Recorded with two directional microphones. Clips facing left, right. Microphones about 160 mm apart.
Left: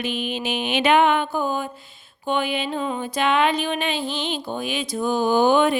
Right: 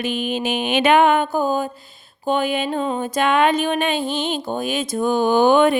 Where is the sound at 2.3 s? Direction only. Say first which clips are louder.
Right 4 dB; 40° right (ahead or behind).